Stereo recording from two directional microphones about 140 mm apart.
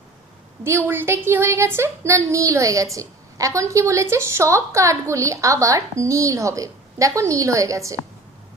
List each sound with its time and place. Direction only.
0.6 s a woman's voice: 20° right (ahead or behind)